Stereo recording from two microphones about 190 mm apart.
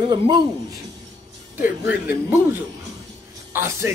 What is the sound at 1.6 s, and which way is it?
Speech, 10° right (ahead or behind).